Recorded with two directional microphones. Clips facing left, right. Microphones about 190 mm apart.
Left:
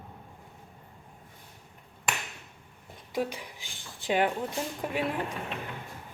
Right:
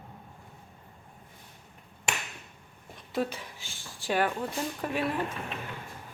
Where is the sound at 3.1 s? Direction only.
10° left (ahead or behind).